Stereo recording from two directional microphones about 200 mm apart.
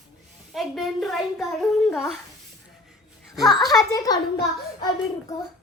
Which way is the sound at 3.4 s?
20° left (ahead or behind).